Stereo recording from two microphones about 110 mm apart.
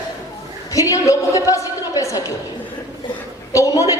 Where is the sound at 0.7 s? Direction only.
30° left (ahead or behind).